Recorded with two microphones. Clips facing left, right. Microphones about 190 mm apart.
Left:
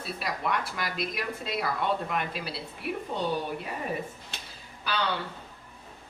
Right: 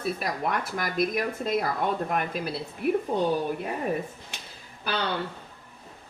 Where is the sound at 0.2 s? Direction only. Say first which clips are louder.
Right 2 dB; 50° right (ahead or behind).